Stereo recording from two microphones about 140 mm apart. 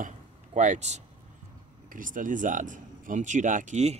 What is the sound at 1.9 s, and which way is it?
Speech, 75° right (ahead or behind).